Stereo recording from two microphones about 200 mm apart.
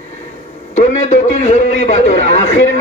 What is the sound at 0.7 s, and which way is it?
A man's voice, 35° left (ahead or behind).